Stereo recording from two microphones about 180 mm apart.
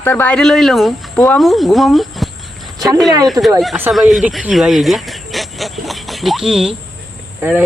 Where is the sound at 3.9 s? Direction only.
Centre (ahead or behind).